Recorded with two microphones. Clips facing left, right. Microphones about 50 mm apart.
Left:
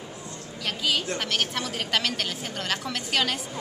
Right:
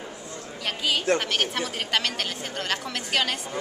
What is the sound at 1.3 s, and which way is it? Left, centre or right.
A woman's voice, centre.